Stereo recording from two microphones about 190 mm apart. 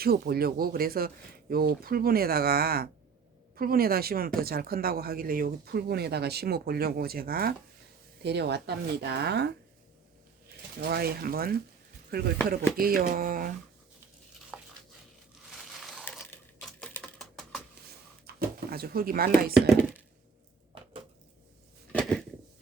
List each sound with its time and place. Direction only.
0.0 s speech: 55° right (ahead or behind)
10.8 s speech: 55° right (ahead or behind)
14.5 s a sound: 5° right (ahead or behind)
16.6 s typing: 5° left (ahead or behind)
18.3 s speech: 55° right (ahead or behind)